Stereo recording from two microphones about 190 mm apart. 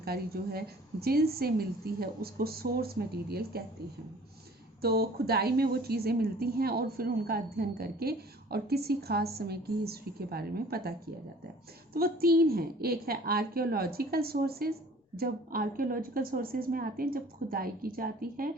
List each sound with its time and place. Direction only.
0.0 s a woman's voice: 55° right (ahead or behind)
4.8 s a woman's voice: 55° right (ahead or behind)
11.9 s a woman's voice: 50° right (ahead or behind)